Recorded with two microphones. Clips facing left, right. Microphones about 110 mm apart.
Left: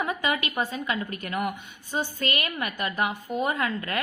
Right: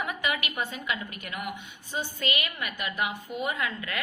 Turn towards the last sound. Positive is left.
turn(degrees=40)  # may be behind; listen again after turning